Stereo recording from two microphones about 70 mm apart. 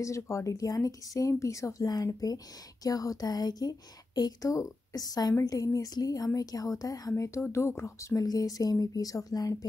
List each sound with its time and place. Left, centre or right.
0.0 s speech: left